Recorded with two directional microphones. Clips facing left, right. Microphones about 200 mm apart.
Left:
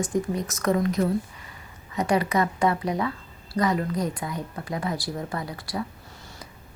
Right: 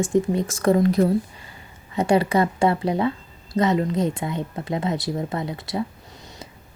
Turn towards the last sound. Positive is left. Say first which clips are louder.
# right 3 dB
turn(degrees=-20)  # may be behind; listen again after turning